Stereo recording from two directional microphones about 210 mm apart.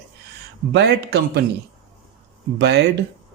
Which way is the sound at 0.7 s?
55° right (ahead or behind).